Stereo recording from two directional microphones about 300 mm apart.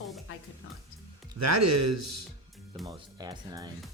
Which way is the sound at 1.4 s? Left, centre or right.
Right.